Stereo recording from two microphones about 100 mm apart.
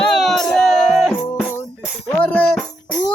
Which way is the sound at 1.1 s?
20° left (ahead or behind).